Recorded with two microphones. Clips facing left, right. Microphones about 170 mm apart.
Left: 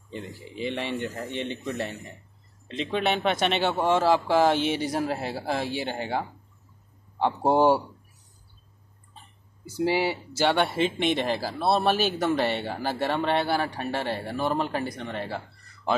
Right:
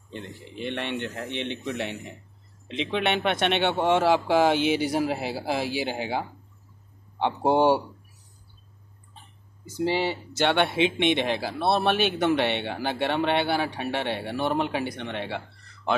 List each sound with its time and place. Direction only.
0.7 s speech: 5° left (ahead or behind)
1.3 s speech: 70° right (ahead or behind)
2.9 s speech: centre (ahead or behind)
9.7 s speech: 10° left (ahead or behind)